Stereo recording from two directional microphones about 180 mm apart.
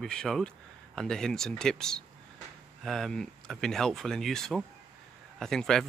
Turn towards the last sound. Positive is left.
turn(degrees=0)  # may be behind; listen again after turning